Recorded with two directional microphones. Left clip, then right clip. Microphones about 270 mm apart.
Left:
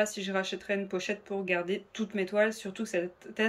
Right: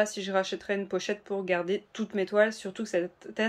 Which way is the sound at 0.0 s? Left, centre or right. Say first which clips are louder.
Right 3 dB; centre.